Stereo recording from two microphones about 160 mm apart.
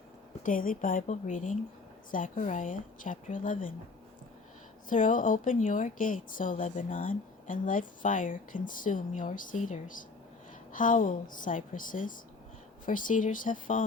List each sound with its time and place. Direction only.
0.4 s speech: 60° left (ahead or behind)
4.9 s speech: 55° left (ahead or behind)